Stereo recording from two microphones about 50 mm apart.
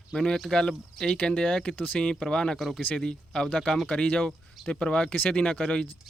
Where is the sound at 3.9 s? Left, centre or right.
Left.